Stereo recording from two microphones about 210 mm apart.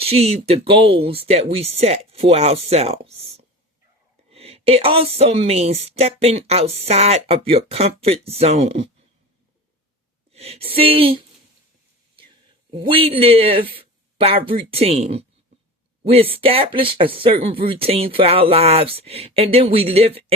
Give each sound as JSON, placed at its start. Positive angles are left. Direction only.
{"t": 0.0, "sound": "a woman's voice", "side_deg": -30}
{"t": 10.3, "sound": "a woman's voice", "side_deg": -30}
{"t": 12.9, "sound": "a woman's voice", "side_deg": -25}